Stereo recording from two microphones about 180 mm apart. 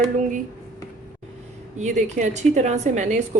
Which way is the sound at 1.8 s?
40° right (ahead or behind).